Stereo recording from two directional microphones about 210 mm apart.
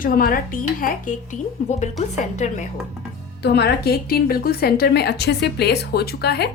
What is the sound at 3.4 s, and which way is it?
A woman's voice, 50° left (ahead or behind).